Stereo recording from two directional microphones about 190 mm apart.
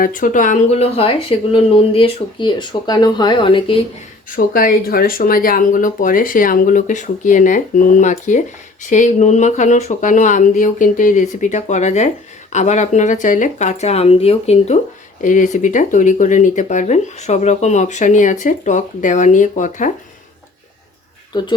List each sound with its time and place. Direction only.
0.0 s speech: 45° left (ahead or behind); by 3.8 s 25° left (ahead or behind)
4.4 s speech: 50° left (ahead or behind)